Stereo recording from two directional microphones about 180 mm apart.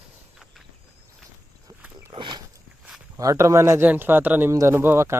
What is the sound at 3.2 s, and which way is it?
Speech, 15° right (ahead or behind).